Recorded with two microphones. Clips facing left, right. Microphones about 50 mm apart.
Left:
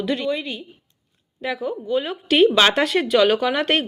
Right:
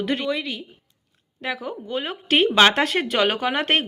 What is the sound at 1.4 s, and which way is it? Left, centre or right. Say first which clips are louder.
Speech: left 3 dB; right.